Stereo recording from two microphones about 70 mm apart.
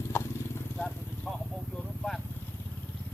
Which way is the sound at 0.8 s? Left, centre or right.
Centre.